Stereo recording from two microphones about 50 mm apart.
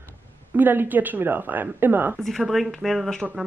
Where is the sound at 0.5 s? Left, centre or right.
Right.